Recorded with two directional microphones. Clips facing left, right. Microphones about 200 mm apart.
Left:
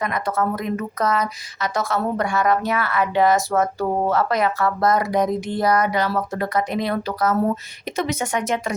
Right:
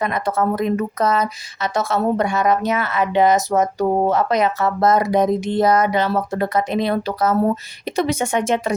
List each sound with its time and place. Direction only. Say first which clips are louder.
0.0 s speech: right 3 dB; 25° right (ahead or behind)